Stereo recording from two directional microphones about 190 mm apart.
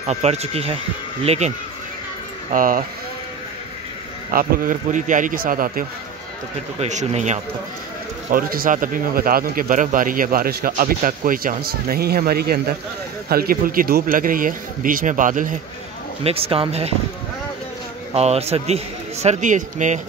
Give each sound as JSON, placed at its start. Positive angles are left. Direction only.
{"t": 0.0, "sound": "a man's voice", "side_deg": -35}
{"t": 2.5, "sound": "speech", "side_deg": -45}
{"t": 4.3, "sound": "speech", "side_deg": -45}
{"t": 6.8, "sound": "a man's voice", "side_deg": -35}
{"t": 8.3, "sound": "speech", "side_deg": -50}
{"t": 16.3, "sound": "a man's voice", "side_deg": -30}
{"t": 18.1, "sound": "a man's voice", "side_deg": -35}